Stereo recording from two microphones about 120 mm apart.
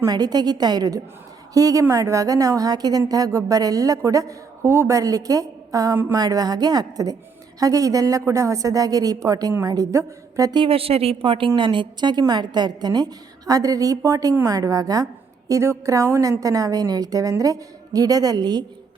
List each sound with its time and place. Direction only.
0.0 s a woman's voice: 35° right (ahead or behind)
10.6 s a woman's voice: 50° right (ahead or behind); by 18.6 s 35° right (ahead or behind)